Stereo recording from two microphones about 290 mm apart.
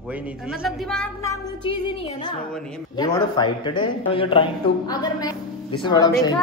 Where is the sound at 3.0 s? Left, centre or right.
Centre.